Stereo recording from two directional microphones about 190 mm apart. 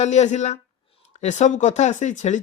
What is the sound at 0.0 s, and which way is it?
Speech, 40° left (ahead or behind).